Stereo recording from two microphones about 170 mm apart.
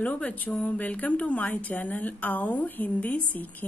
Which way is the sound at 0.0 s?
10° left (ahead or behind).